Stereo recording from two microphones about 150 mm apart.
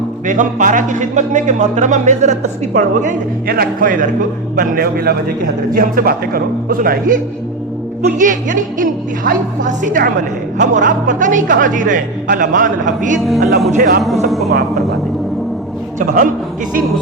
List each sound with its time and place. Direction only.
0.3 s speech: 60° right (ahead or behind)
8.0 s speech: 60° right (ahead or behind)
13.1 s speech: centre (ahead or behind)
13.7 s speech: 60° right (ahead or behind)
14.3 s speech: centre (ahead or behind)
16.0 s speech: 60° right (ahead or behind)